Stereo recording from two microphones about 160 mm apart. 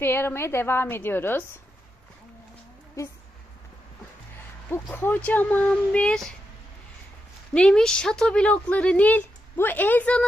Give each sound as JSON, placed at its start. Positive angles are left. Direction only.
{"t": 0.0, "sound": "speech", "side_deg": 15}
{"t": 3.0, "sound": "speech", "side_deg": 20}
{"t": 4.9, "sound": "speech", "side_deg": 10}
{"t": 7.5, "sound": "speech", "side_deg": 5}